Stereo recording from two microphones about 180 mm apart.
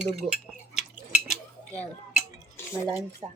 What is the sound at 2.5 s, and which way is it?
Stir, 15° left (ahead or behind).